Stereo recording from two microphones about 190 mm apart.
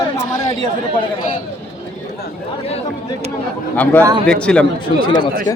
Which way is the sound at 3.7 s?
10° left (ahead or behind).